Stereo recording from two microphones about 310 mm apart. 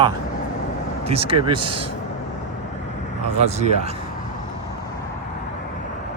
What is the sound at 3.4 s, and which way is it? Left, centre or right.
Speech, right.